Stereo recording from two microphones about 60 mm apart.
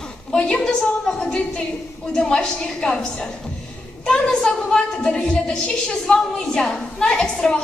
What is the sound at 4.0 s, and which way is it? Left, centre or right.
A woman's voice, centre.